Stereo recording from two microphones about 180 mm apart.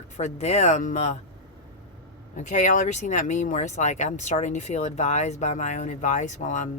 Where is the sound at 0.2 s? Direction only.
40° left (ahead or behind).